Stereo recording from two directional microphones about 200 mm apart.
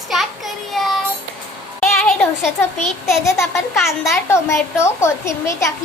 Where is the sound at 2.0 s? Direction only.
Centre (ahead or behind).